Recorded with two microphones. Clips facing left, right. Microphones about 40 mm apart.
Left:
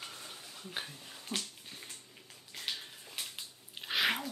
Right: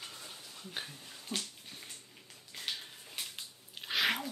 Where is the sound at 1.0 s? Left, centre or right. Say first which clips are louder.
Left 1 dB; centre.